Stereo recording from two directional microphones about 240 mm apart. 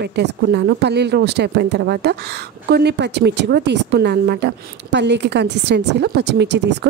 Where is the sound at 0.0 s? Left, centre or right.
Right.